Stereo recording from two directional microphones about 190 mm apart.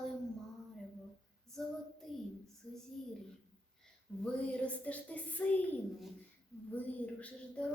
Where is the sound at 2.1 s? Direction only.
Centre (ahead or behind).